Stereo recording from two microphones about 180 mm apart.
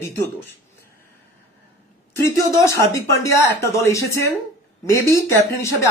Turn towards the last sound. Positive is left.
turn(degrees=15)  # may be behind; listen again after turning